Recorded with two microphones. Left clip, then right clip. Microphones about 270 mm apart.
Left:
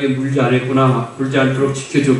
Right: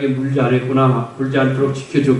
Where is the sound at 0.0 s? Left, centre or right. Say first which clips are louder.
Left 1 dB; centre.